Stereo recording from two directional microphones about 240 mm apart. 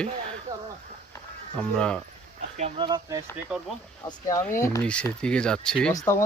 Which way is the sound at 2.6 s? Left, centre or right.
Centre.